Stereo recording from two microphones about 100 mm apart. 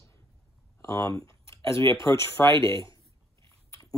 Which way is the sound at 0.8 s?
30° left (ahead or behind).